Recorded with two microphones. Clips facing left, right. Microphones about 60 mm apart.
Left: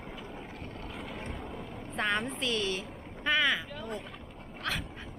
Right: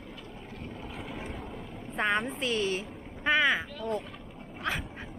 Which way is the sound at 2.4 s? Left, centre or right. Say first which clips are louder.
Right 2 dB; right.